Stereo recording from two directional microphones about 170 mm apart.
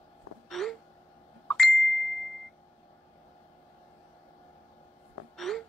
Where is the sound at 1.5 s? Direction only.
Centre (ahead or behind).